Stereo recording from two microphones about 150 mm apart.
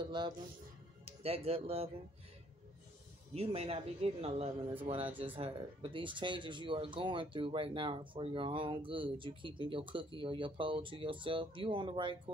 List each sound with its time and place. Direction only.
0.0 s a sound: 30° right (ahead or behind)
1.0 s speech: 40° right (ahead or behind)
3.3 s speech: 40° right (ahead or behind)